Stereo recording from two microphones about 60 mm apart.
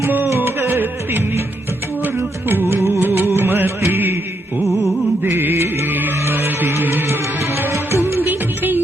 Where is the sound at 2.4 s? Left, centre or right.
Right.